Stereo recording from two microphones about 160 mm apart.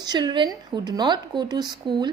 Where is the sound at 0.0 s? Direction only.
25° right (ahead or behind).